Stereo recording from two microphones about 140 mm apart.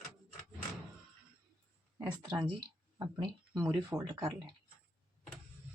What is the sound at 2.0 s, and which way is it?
Speech, 30° right (ahead or behind).